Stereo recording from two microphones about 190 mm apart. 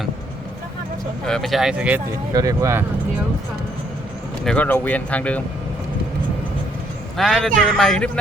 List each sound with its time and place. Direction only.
1.2 s speech: centre (ahead or behind)
2.3 s speech: 20° right (ahead or behind)
4.4 s speech: 5° left (ahead or behind)
7.2 s speech: centre (ahead or behind)